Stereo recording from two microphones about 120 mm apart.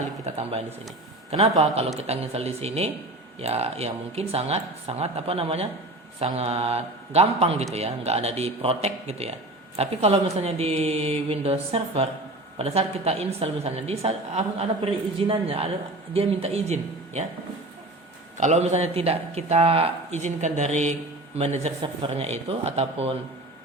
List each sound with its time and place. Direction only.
0.3 s a woman's voice: 65° right (ahead or behind)
18.3 s a man's voice: 80° right
21.3 s a woman's voice: 60° right (ahead or behind)
21.8 s a woman's voice: 50° right (ahead or behind)